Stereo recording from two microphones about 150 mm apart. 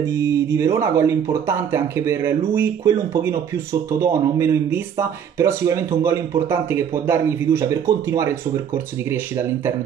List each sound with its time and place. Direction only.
0.0 s speech: 20° right (ahead or behind)